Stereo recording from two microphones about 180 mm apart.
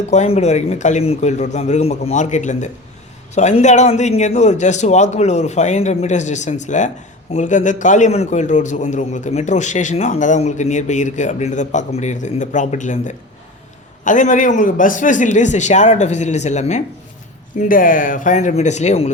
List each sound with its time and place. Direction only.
0.1 s a man's voice: 40° left (ahead or behind)